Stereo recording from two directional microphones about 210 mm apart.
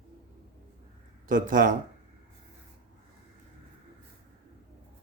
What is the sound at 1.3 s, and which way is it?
Speech, 40° right (ahead or behind).